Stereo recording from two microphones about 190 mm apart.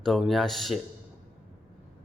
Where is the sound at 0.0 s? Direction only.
Centre (ahead or behind).